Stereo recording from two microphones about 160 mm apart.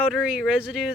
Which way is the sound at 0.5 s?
5° right (ahead or behind).